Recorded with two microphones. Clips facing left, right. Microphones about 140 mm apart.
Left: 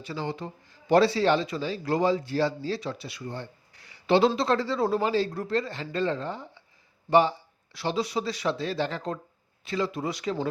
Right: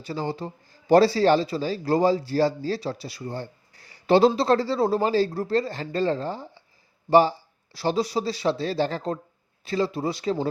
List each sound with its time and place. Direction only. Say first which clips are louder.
0.0 s speech: right 3 dB; 35° right (ahead or behind)